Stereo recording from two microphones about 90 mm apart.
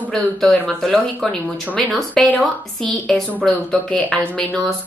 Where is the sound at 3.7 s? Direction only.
15° left (ahead or behind).